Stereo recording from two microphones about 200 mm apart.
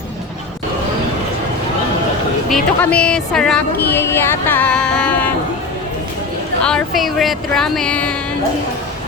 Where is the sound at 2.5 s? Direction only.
5° left (ahead or behind).